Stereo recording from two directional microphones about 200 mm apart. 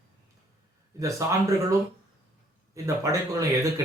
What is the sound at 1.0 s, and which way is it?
Speech, 15° right (ahead or behind).